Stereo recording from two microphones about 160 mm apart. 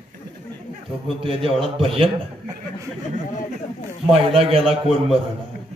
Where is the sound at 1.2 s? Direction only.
35° right (ahead or behind).